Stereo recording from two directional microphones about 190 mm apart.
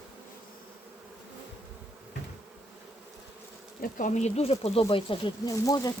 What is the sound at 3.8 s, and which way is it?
Speech, 45° left (ahead or behind).